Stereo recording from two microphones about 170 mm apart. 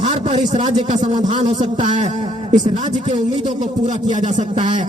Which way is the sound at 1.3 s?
30° right (ahead or behind).